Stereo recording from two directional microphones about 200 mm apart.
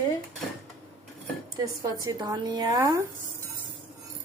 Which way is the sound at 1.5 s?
20° right (ahead or behind).